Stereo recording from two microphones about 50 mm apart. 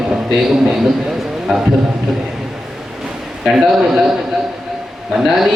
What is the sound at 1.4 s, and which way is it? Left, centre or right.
Speech, centre.